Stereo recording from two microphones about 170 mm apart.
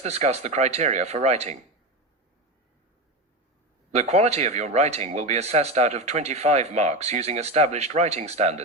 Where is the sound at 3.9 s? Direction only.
40° right (ahead or behind).